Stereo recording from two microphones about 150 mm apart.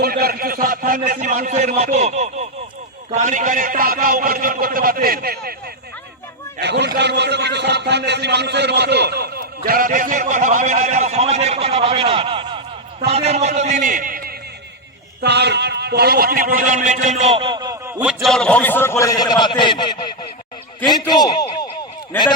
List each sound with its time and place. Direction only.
0.0 s a man's voice: 90° right
6.8 s a sound: 90° right
9.6 s a man's voice: 75° right (ahead or behind)
15.2 s a man's voice: 90° right; by 17.9 s 25° right (ahead or behind)
18.0 s a man's voice: 5° right (ahead or behind); by 21.7 s 25° left (ahead or behind)